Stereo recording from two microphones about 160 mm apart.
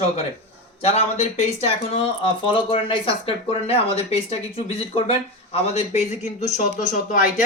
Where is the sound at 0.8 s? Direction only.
40° left (ahead or behind).